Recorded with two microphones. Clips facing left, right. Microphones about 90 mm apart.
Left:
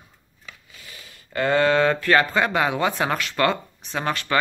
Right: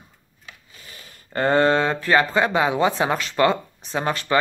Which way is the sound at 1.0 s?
40° right (ahead or behind).